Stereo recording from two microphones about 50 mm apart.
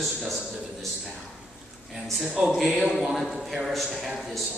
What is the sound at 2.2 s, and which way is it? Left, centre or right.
Speech, centre.